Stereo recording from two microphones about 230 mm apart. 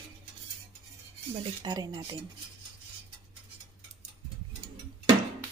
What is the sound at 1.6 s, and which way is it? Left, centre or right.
Speech, centre.